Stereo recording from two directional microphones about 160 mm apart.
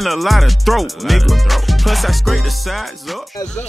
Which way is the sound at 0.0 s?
Centre (ahead or behind).